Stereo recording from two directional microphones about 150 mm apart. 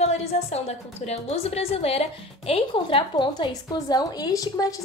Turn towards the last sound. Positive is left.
turn(degrees=25)  # may be behind; listen again after turning